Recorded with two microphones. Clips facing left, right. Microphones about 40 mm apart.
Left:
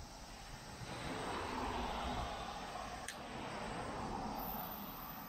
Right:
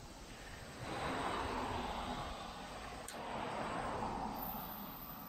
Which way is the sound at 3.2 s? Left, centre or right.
Centre.